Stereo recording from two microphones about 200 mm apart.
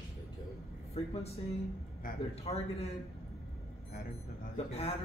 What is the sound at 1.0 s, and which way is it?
Speech, 30° left (ahead or behind).